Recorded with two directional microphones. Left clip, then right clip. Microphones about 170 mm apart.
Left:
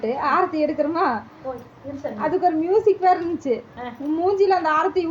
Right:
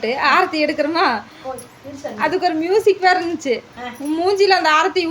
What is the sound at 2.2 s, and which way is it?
A woman's voice, 15° right (ahead or behind).